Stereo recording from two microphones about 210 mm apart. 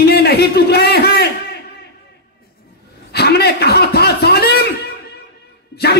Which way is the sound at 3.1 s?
50° left (ahead or behind).